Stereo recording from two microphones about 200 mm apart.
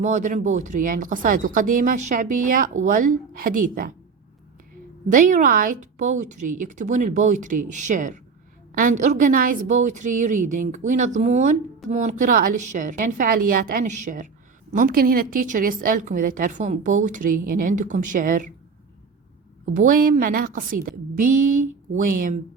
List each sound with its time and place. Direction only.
0.0 s a woman's voice: 40° right (ahead or behind)
5.0 s a woman's voice: 40° right (ahead or behind)
19.9 s a woman's voice: 45° right (ahead or behind)